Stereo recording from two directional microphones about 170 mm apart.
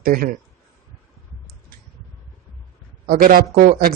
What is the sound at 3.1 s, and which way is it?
Speech, 60° right (ahead or behind).